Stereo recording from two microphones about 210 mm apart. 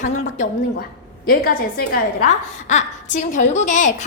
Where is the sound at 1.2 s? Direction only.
45° left (ahead or behind).